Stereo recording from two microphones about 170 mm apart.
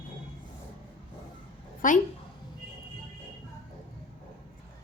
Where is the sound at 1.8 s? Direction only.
50° left (ahead or behind).